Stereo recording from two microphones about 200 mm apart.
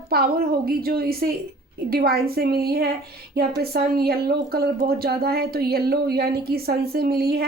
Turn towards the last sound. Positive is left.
turn(degrees=-50)  # may be behind; listen again after turning